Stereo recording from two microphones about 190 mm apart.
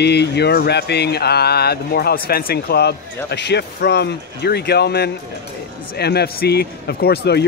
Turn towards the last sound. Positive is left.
turn(degrees=60)  # may be behind; listen again after turning